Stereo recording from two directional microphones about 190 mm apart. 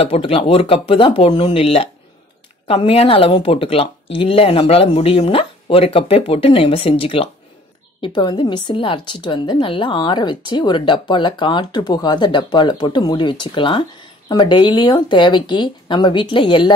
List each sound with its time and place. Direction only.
0.0 s a woman's voice: 30° left (ahead or behind)